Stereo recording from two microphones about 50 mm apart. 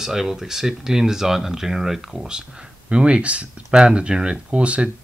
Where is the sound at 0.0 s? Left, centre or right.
Centre.